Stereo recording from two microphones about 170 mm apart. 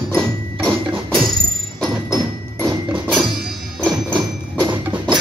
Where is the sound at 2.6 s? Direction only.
15° right (ahead or behind).